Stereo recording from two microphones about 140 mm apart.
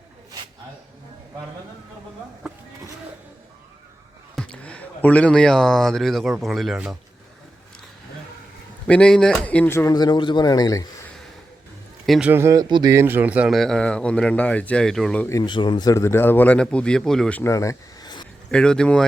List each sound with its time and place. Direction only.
4.4 s speech: 10° left (ahead or behind)
8.9 s speech: 5° left (ahead or behind)
9.9 s speech: 30° left (ahead or behind)
12.0 s a man's voice: centre (ahead or behind)
12.3 s speech: 20° right (ahead or behind)
12.6 s speech: 35° right (ahead or behind)
12.9 s speech: 15° right (ahead or behind)
13.5 s speech: 5° left (ahead or behind)
15.3 s speech: 30° left (ahead or behind); by 17.4 s 5° left (ahead or behind)
17.4 s speech: 20° left (ahead or behind)
18.5 s speech: 5° left (ahead or behind)